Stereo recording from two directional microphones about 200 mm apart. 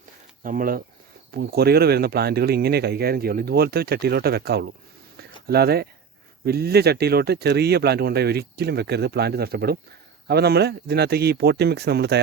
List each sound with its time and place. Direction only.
0.4 s speech: 45° right (ahead or behind)
5.1 s a sound: 50° right (ahead or behind)
6.4 s speech: 50° right (ahead or behind)